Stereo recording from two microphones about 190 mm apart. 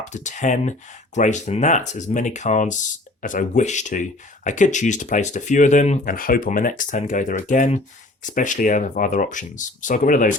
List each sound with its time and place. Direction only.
0.0 s speech: 40° left (ahead or behind)